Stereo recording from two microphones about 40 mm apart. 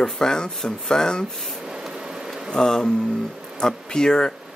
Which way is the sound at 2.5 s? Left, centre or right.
Centre.